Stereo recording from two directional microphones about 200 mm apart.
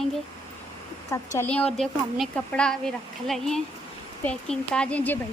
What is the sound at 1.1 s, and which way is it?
Speech, 10° left (ahead or behind).